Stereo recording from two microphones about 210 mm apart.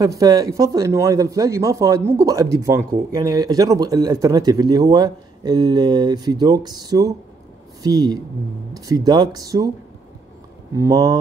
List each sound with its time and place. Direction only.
0.0 s speech: 15° right (ahead or behind)
10.8 s speech: 15° right (ahead or behind)